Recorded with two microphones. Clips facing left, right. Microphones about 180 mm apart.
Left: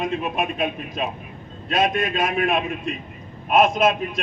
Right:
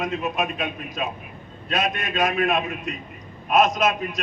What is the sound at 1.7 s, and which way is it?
A man's voice, 25° left (ahead or behind).